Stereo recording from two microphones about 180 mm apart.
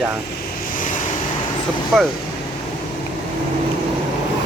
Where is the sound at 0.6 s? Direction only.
50° left (ahead or behind).